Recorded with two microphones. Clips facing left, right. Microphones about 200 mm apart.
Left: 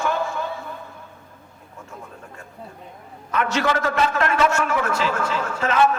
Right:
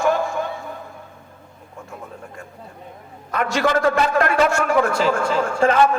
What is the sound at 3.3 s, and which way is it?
A man's voice, 40° right (ahead or behind).